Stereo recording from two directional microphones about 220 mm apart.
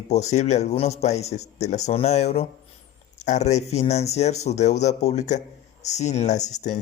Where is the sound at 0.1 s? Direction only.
30° left (ahead or behind).